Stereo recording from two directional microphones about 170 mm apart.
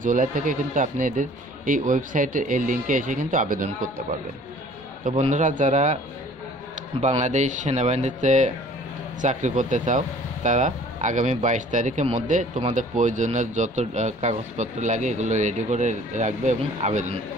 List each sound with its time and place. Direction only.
0.0 s speech: 50° right (ahead or behind)
5.3 s speech: 50° right (ahead or behind)
7.0 s speech: 45° right (ahead or behind)